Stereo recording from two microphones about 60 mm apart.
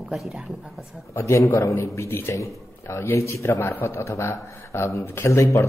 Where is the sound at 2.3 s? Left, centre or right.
Left.